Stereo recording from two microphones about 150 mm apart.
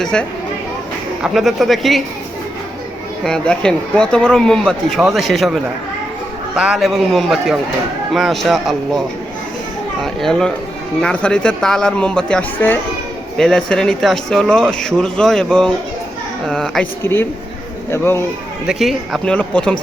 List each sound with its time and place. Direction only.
0.0 s speech: 5° left (ahead or behind)
3.2 s speech: 5° left (ahead or behind)
6.7 s speech: centre (ahead or behind)
10.0 s speech: centre (ahead or behind)
13.3 s speech: centre (ahead or behind)
17.0 s speech: 15° left (ahead or behind)
18.7 s speech: centre (ahead or behind)